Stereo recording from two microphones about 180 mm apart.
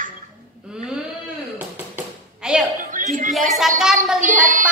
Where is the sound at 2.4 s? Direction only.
5° right (ahead or behind).